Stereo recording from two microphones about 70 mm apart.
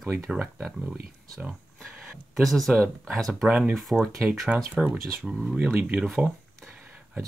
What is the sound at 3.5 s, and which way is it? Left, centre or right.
Speech, centre.